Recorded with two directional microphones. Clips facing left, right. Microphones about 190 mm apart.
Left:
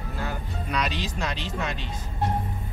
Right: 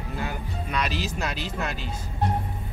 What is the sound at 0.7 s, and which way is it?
Speech, centre (ahead or behind).